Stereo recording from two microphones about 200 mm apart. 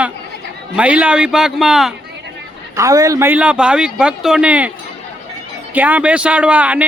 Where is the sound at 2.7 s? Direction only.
15° right (ahead or behind).